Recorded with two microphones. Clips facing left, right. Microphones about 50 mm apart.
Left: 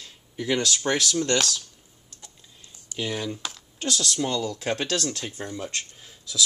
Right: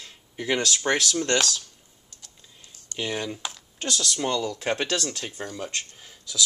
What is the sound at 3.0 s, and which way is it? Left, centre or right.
Speech, centre.